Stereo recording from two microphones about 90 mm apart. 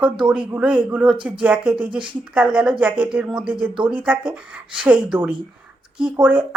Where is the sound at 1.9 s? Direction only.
65° right (ahead or behind).